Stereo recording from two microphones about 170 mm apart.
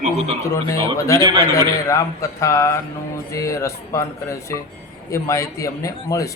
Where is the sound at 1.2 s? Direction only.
25° right (ahead or behind).